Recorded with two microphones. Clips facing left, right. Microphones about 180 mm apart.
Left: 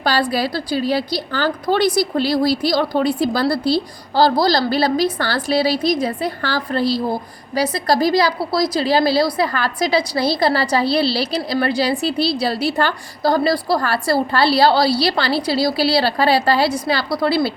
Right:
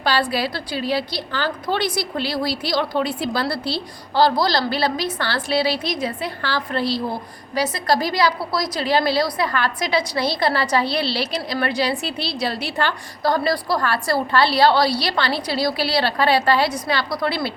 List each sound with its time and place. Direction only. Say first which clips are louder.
0.0 s a woman's voice: left 2 dB; 40° left (ahead or behind)